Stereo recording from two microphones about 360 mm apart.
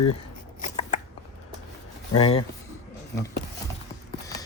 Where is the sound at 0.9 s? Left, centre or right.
Centre.